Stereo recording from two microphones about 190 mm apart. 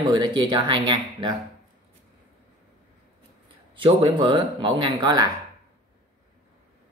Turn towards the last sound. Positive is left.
turn(degrees=-20)  # may be behind; listen again after turning